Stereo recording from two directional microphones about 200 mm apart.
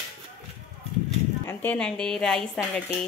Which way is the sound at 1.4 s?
10° left (ahead or behind).